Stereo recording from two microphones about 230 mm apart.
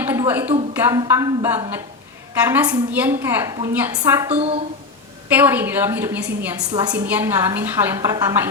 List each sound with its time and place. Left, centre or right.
0.0 s a sound: centre
0.7 s a woman's voice: centre
4.3 s a woman's voice: right
5.3 s a woman's voice: centre